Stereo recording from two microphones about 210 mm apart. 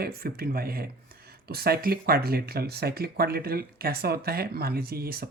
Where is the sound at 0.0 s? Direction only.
45° right (ahead or behind).